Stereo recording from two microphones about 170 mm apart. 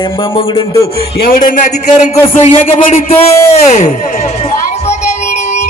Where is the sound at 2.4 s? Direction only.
35° left (ahead or behind).